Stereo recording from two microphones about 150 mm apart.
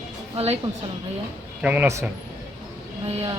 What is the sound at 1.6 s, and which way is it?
Speech, 10° right (ahead or behind).